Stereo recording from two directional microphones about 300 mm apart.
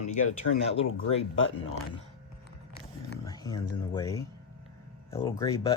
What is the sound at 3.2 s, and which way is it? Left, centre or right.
Speech, centre.